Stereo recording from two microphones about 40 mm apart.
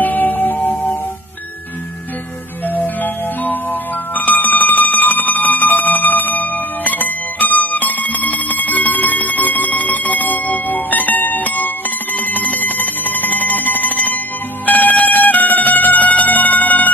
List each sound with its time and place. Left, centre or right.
0.0 s music: left
2.7 s music: left